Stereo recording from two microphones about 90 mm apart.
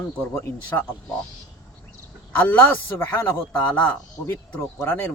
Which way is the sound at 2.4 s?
20° left (ahead or behind).